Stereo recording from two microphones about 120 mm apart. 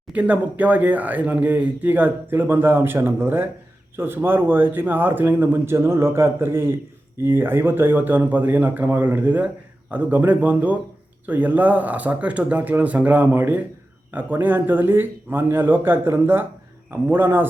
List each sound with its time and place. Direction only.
0.1 s speech: 10° right (ahead or behind)